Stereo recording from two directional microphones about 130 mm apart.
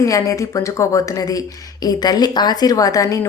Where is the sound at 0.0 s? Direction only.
25° left (ahead or behind).